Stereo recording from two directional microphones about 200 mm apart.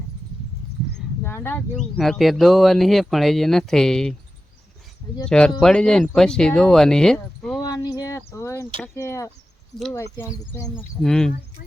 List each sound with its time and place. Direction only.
1.2 s speech: 10° left (ahead or behind)
5.2 s speech: 5° left (ahead or behind)
7.6 s a sound: 20° left (ahead or behind)
9.0 s speech: 15° left (ahead or behind)